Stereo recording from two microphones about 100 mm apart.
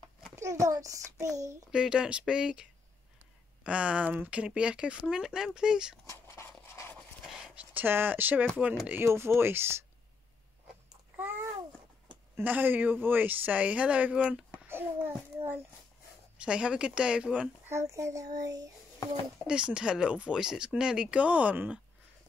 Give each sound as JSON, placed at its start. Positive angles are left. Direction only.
{"t": 0.4, "sound": "a child's voice", "side_deg": -35}
{"t": 1.7, "sound": "speech", "side_deg": -10}
{"t": 6.0, "sound": "a sound", "side_deg": 30}
{"t": 7.2, "sound": "a sound", "side_deg": -10}
{"t": 8.8, "sound": "speech", "side_deg": -25}
{"t": 11.1, "sound": "babbling", "side_deg": -20}
{"t": 12.4, "sound": "speech", "side_deg": -20}
{"t": 14.7, "sound": "a sound", "side_deg": -20}
{"t": 16.3, "sound": "speech", "side_deg": -10}
{"t": 17.6, "sound": "a child's voice", "side_deg": -30}
{"t": 19.4, "sound": "speech", "side_deg": -10}